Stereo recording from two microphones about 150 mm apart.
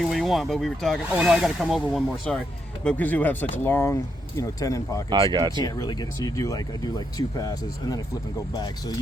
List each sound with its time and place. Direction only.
0.1 s speech: centre (ahead or behind); by 5.0 s 20° left (ahead or behind)
5.0 s speech: 30° right (ahead or behind)
5.6 s speech: 25° left (ahead or behind)